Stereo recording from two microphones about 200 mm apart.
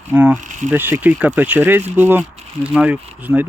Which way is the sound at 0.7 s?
10° right (ahead or behind).